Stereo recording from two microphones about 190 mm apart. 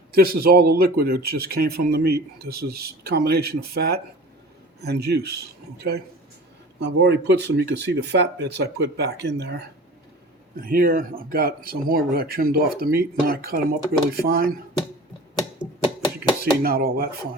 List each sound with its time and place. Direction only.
0.1 s speech: 50° right (ahead or behind)
10.6 s speech: 50° right (ahead or behind)
16.6 s speech: 55° right (ahead or behind)